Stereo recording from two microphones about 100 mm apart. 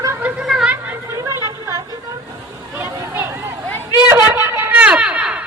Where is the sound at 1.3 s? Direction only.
30° right (ahead or behind).